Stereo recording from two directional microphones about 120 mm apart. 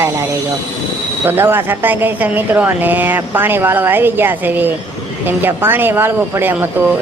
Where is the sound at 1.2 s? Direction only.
20° right (ahead or behind).